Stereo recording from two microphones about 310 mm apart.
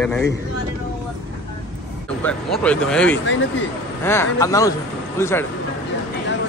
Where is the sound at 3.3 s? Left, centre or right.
Left.